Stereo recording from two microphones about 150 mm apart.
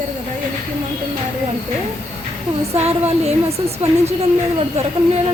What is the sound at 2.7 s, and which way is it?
A woman's voice, 45° right (ahead or behind).